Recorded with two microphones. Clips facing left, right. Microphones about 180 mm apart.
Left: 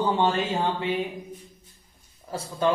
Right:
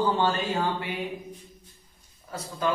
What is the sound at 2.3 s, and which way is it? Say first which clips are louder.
Speech: left 4 dB; 30° left (ahead or behind).